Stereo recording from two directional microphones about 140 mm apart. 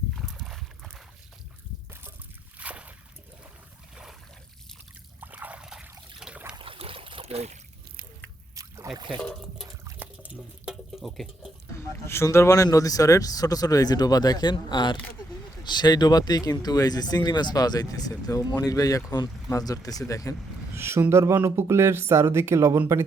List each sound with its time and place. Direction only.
0.2 s boat: centre (ahead or behind)
2.6 s a sound: 10° right (ahead or behind)
5.2 s a sound: 10° right (ahead or behind)
6.1 s trickle: 5° right (ahead or behind)
6.6 s boat: 40° right (ahead or behind)
8.5 s boat: 25° right (ahead or behind)
9.1 s speech: 35° right (ahead or behind)
9.6 s liquid: 25° right (ahead or behind)
10.2 s water: 5° right (ahead or behind)
11.7 s a sound: 20° left (ahead or behind)
12.0 s speech: 20° left (ahead or behind)
20.7 s speech: 15° right (ahead or behind)